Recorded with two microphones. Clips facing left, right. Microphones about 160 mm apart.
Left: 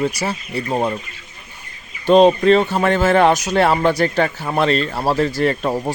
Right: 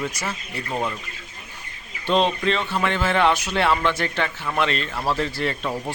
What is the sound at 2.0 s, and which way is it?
Speech, 45° left (ahead or behind).